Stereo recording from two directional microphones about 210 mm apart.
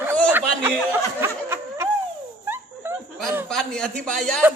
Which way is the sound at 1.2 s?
10° right (ahead or behind).